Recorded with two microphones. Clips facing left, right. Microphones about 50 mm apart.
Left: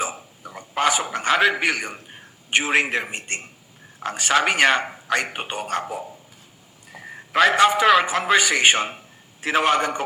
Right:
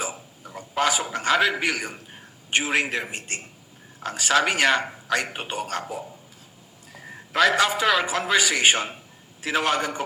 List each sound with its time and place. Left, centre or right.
0.7 s a man's voice: left